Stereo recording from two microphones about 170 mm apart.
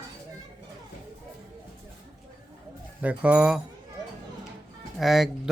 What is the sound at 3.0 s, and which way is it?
Speech, 5° right (ahead or behind).